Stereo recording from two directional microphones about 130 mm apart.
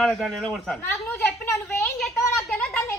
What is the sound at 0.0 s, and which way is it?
Speech, centre (ahead or behind).